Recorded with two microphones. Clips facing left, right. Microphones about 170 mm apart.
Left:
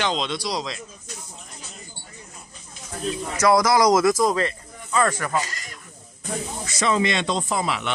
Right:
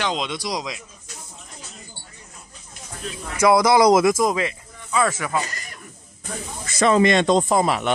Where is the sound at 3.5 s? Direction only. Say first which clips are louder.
Right 3 dB; 25° right (ahead or behind).